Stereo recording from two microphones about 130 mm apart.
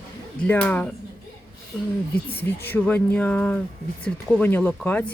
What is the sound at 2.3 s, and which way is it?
Speech, 15° left (ahead or behind).